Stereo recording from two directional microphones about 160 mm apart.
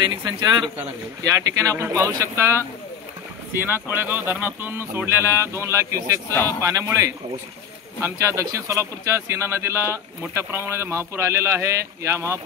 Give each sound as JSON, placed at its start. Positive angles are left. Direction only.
{"t": 0.0, "sound": "speech", "side_deg": -30}